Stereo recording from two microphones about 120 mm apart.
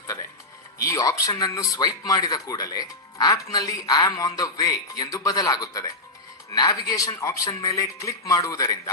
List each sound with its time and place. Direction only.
0.9 s speech: 30° left (ahead or behind)